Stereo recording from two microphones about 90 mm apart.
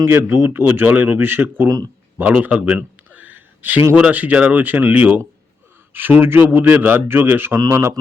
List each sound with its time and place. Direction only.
0.0 s speech: 25° right (ahead or behind)
2.1 s a sound: 20° right (ahead or behind)
3.9 s a man's voice: 15° right (ahead or behind); by 7.9 s 35° right (ahead or behind)